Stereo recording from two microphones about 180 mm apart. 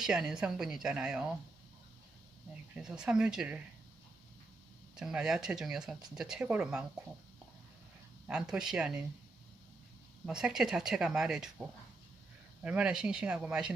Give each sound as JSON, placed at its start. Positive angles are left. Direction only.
{"t": 0.0, "sound": "speech", "side_deg": -5}
{"t": 2.7, "sound": "speech", "side_deg": -5}
{"t": 4.9, "sound": "speech", "side_deg": -5}
{"t": 8.3, "sound": "speech", "side_deg": -5}
{"t": 10.2, "sound": "speech", "side_deg": -5}
{"t": 12.6, "sound": "speech", "side_deg": -5}